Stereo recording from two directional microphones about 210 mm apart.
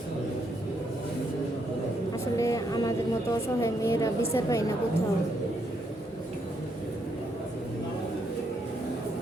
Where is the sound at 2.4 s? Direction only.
15° left (ahead or behind).